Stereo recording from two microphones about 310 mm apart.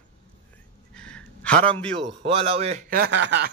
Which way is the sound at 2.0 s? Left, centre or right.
Centre.